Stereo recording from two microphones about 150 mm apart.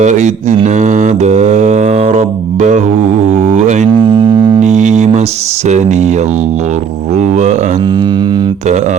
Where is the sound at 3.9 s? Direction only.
30° right (ahead or behind).